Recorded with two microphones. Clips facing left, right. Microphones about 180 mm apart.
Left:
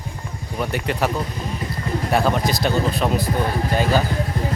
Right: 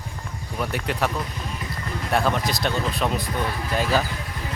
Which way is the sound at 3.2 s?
35° left (ahead or behind).